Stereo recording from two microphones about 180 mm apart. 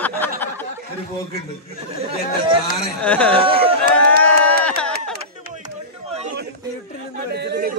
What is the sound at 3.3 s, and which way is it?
Speech, 30° right (ahead or behind).